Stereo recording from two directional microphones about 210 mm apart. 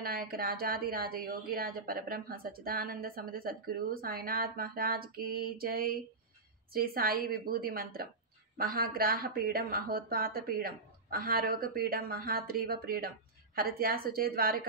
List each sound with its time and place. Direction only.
0.0 s speech: 45° right (ahead or behind)